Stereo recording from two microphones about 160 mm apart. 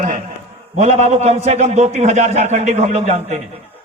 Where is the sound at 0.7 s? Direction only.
40° right (ahead or behind).